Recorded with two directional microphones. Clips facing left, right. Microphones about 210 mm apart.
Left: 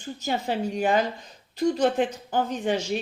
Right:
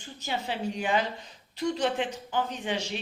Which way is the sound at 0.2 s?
45° left (ahead or behind).